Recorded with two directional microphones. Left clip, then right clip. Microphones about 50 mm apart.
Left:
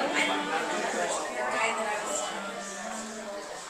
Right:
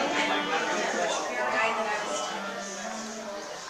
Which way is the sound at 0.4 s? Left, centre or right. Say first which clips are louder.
Right 2 dB; right.